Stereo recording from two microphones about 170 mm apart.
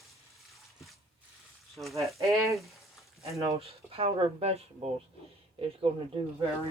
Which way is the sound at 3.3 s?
35° right (ahead or behind).